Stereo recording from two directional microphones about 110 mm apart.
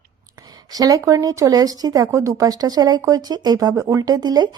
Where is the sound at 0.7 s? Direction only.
35° right (ahead or behind).